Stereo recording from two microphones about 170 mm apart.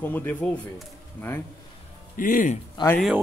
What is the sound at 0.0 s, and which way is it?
Speech, 10° left (ahead or behind).